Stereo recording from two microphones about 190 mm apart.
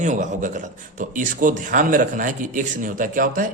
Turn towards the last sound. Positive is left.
turn(degrees=-45)  # may be behind; listen again after turning